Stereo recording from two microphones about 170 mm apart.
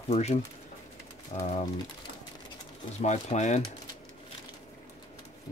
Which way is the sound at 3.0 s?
45° left (ahead or behind).